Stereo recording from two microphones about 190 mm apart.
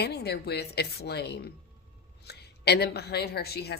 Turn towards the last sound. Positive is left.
turn(degrees=55)  # may be behind; listen again after turning